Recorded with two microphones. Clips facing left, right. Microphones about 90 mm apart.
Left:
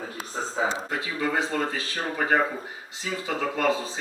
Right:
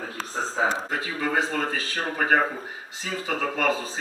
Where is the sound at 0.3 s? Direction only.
40° right (ahead or behind).